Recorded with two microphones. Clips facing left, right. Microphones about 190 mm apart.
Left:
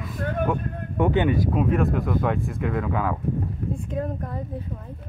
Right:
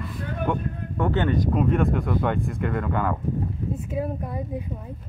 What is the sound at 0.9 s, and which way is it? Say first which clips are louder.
Speech: left 2 dB; 15° left (ahead or behind).